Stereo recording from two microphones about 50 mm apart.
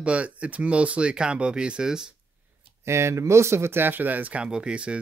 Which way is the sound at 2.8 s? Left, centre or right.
Right.